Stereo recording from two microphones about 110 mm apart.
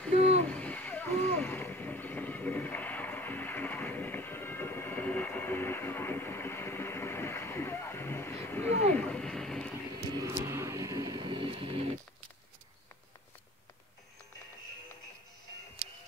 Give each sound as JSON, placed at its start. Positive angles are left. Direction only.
{"t": 0.5, "sound": "vehicle", "side_deg": 10}
{"t": 10.2, "sound": "vehicle", "side_deg": -25}
{"t": 11.2, "sound": "a sound", "side_deg": -50}